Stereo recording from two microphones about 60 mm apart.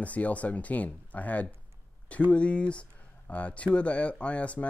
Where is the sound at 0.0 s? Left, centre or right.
Left.